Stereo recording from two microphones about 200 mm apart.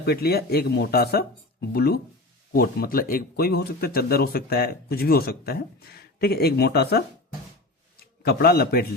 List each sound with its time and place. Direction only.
0.0 s speech: 50° left (ahead or behind)
8.2 s speech: 50° left (ahead or behind)